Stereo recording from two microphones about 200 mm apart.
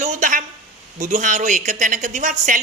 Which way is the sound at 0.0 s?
40° right (ahead or behind).